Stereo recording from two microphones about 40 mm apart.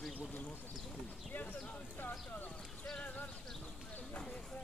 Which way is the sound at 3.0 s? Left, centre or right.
Left.